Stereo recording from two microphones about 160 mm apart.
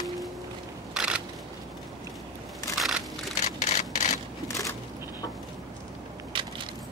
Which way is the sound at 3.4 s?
50° left (ahead or behind).